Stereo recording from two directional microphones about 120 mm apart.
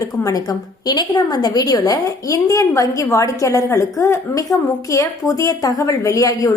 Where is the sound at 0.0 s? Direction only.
30° left (ahead or behind).